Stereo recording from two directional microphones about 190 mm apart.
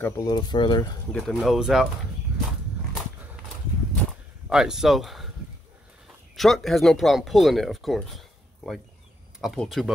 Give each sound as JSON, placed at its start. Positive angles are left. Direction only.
{"t": 0.0, "sound": "speech", "side_deg": 20}
{"t": 1.1, "sound": "speech", "side_deg": 0}
{"t": 4.5, "sound": "speech", "side_deg": -5}
{"t": 6.3, "sound": "speech", "side_deg": 0}